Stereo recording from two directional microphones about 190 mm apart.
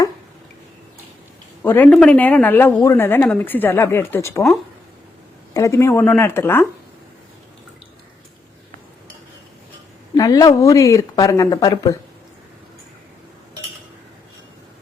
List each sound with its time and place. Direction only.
1.6 s speech: 10° left (ahead or behind)
5.5 s speech: 15° left (ahead or behind)
10.2 s speech: 20° left (ahead or behind)